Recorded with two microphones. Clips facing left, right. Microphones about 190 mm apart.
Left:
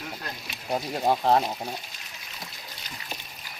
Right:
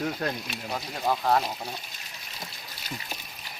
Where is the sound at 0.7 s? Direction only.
30° left (ahead or behind).